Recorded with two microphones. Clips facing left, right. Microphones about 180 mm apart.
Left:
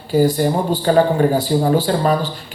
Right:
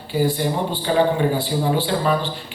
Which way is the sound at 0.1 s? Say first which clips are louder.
Left 5 dB; 40° left (ahead or behind).